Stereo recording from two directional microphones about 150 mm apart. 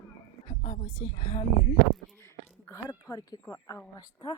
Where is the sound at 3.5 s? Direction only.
20° left (ahead or behind).